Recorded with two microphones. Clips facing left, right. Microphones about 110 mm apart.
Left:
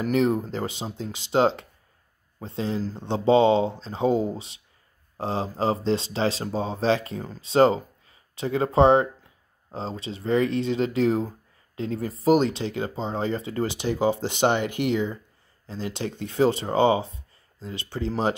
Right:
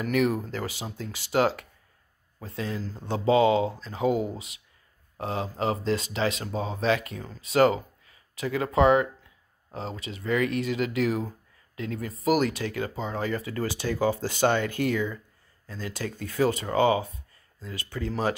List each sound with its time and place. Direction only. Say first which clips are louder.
0.0 s speech: left 3 dB; 30° left (ahead or behind)